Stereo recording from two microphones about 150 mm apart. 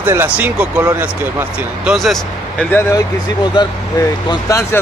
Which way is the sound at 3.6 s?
30° left (ahead or behind).